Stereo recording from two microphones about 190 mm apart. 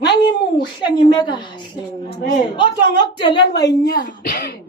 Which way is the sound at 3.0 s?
25° left (ahead or behind).